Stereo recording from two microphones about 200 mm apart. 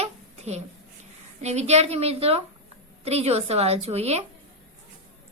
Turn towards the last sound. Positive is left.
turn(degrees=-30)  # may be behind; listen again after turning